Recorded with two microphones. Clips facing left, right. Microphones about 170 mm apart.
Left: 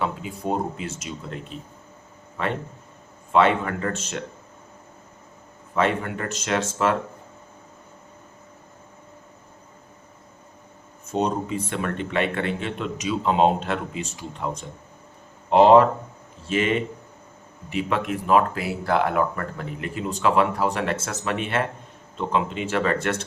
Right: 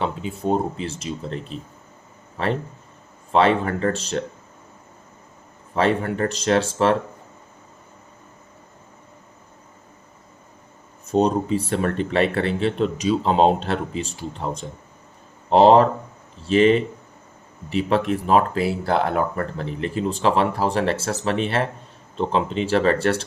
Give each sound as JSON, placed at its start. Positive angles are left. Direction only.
{"t": 0.0, "sound": "speech", "side_deg": -25}
{"t": 3.3, "sound": "speech", "side_deg": -35}
{"t": 5.7, "sound": "speech", "side_deg": -35}
{"t": 11.1, "sound": "speech", "side_deg": -35}